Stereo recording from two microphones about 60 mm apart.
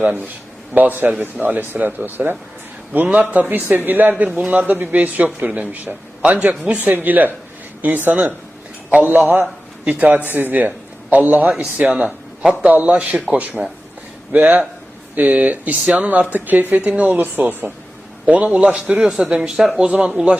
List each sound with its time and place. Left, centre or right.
0.0 s a man's voice: right
11.5 s a man's voice: centre